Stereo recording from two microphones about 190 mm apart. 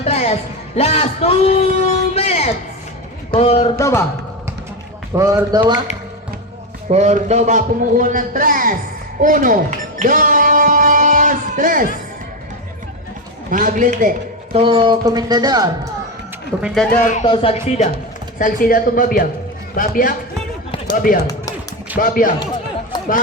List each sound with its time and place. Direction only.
0.0 s a sound: 35° left (ahead or behind)
0.8 s a man's voice: 30° left (ahead or behind)
3.8 s speech: 15° left (ahead or behind)
5.1 s a man's voice: 15° right (ahead or behind)
6.9 s a man's voice: 35° right (ahead or behind)
9.2 s music: 45° right (ahead or behind)
13.5 s a man's voice: 45° right (ahead or behind)
14.5 s speech: 25° right (ahead or behind)
16.6 s speech: centre (ahead or behind)
17.0 s speech: 40° left (ahead or behind)
17.2 s speech: 30° left (ahead or behind)
18.3 s speech: 45° left (ahead or behind)